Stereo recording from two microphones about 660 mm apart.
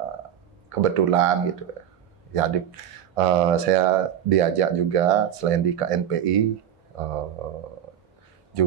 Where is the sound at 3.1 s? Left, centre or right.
Right.